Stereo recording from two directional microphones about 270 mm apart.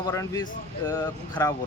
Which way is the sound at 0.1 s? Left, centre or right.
Centre.